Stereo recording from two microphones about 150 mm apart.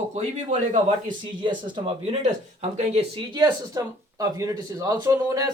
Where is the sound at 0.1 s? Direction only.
50° right (ahead or behind).